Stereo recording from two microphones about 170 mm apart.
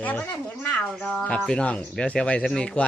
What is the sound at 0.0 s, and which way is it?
Speech, 10° left (ahead or behind).